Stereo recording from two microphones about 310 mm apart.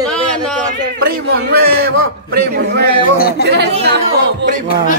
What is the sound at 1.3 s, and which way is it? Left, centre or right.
Speech, right.